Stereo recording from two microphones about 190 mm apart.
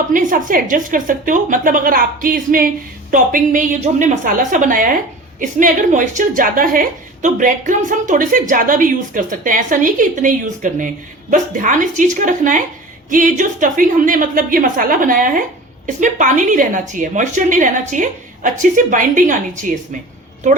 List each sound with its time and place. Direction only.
0.1 s a woman's voice: 45° right (ahead or behind)